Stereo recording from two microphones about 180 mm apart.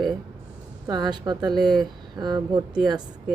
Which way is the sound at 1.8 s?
25° right (ahead or behind).